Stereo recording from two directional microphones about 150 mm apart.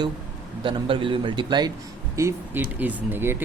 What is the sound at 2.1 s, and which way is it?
Speech, 20° right (ahead or behind).